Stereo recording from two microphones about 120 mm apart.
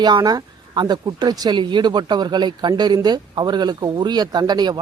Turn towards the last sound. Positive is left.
turn(degrees=-35)  # may be behind; listen again after turning